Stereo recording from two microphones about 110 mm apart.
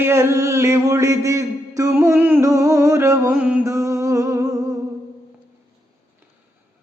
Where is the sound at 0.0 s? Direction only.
25° right (ahead or behind).